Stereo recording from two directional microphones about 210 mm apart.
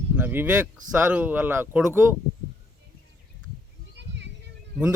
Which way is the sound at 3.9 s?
55° right (ahead or behind).